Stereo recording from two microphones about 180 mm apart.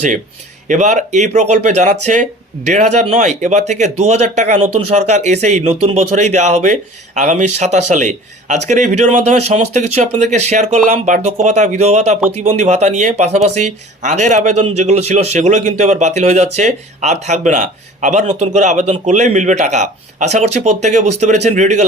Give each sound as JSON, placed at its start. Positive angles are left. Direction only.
{"t": 0.7, "sound": "a man's voice", "side_deg": -40}